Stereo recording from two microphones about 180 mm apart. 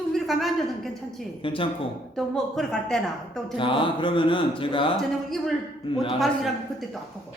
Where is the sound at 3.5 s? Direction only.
25° left (ahead or behind).